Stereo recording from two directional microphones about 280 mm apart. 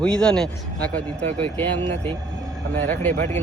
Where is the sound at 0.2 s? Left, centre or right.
Centre.